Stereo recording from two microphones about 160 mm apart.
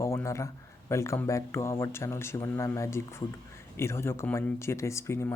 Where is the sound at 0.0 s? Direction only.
15° left (ahead or behind).